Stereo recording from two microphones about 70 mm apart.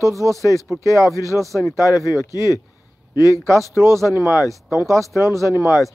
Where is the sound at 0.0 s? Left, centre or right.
Right.